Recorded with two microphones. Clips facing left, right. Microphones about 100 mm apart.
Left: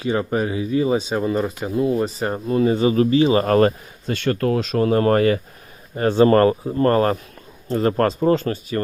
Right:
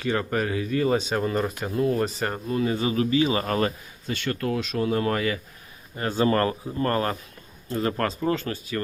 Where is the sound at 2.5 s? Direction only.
30° left (ahead or behind).